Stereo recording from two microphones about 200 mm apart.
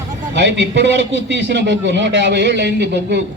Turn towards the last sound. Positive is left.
turn(degrees=-60)  # may be behind; listen again after turning